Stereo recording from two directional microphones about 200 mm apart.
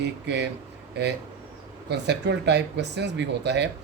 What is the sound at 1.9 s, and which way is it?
Speech, 60° right (ahead or behind).